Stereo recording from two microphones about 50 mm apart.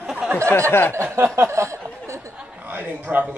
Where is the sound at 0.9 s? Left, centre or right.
Right.